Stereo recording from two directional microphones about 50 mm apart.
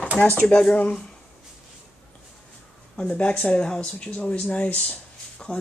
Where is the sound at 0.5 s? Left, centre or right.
Centre.